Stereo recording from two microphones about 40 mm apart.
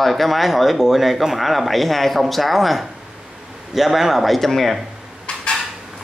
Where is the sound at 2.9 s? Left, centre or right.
Centre.